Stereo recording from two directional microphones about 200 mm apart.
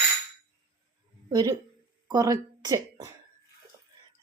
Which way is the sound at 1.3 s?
20° right (ahead or behind).